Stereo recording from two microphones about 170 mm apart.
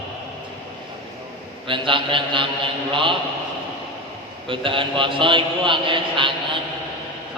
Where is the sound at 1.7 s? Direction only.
30° right (ahead or behind).